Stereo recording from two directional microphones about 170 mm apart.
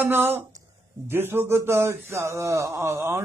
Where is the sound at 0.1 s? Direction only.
10° right (ahead or behind).